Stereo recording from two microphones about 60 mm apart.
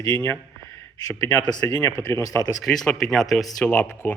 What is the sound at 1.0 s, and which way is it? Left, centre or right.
A man's voice, left.